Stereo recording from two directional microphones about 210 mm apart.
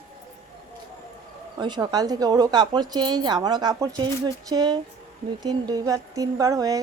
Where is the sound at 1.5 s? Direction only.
20° right (ahead or behind).